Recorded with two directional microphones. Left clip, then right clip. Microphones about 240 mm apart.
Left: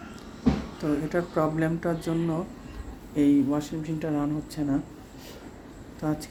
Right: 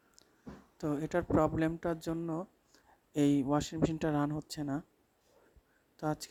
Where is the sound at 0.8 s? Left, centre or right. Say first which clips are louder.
Left 6 dB; right.